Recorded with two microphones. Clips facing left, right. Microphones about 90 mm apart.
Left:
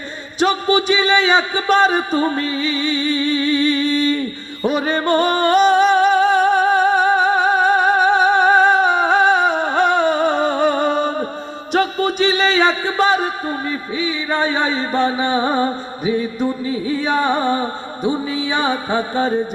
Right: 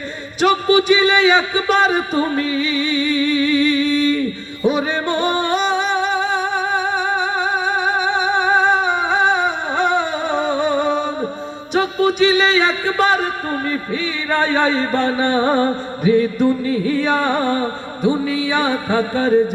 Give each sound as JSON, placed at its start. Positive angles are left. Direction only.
{"t": 0.3, "sound": "music", "side_deg": 30}